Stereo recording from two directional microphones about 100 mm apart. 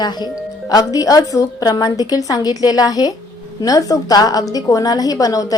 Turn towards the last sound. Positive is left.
turn(degrees=40)  # may be behind; listen again after turning